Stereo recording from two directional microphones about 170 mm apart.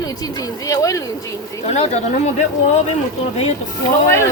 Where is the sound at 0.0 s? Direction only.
20° left (ahead or behind).